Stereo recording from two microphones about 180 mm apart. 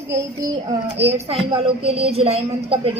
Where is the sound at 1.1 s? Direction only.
30° right (ahead or behind).